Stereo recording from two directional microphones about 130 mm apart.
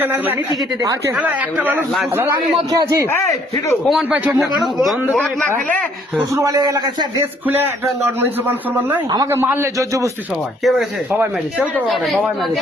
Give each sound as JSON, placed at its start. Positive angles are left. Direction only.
{"t": 0.0, "sound": "a man's voice", "side_deg": -15}
{"t": 0.8, "sound": "a man's voice", "side_deg": -25}
{"t": 1.2, "sound": "a man's voice", "side_deg": -10}
{"t": 2.7, "sound": "a man's voice", "side_deg": -25}
{"t": 3.8, "sound": "a man's voice", "side_deg": 0}
{"t": 6.3, "sound": "a man's voice", "side_deg": -30}
{"t": 7.2, "sound": "a man's voice", "side_deg": -15}
{"t": 10.6, "sound": "a man's voice", "side_deg": 0}
{"t": 11.1, "sound": "a man's voice", "side_deg": -15}
{"t": 11.9, "sound": "a man's voice", "side_deg": 0}